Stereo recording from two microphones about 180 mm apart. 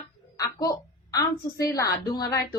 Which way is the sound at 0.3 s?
20° left (ahead or behind).